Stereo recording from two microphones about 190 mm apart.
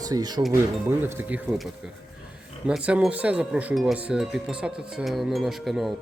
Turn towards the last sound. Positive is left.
turn(degrees=0)  # may be behind; listen again after turning